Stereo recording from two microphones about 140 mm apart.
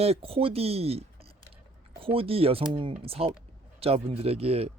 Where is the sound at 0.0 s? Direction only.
45° right (ahead or behind).